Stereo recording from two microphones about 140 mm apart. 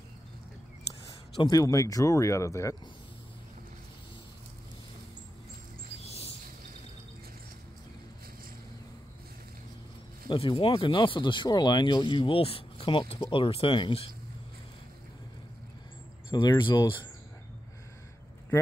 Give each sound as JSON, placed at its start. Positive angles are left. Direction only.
{"t": 1.4, "sound": "speech", "side_deg": 25}
{"t": 6.0, "sound": "bird", "side_deg": 45}
{"t": 10.2, "sound": "speech", "side_deg": 40}
{"t": 16.3, "sound": "speech", "side_deg": 35}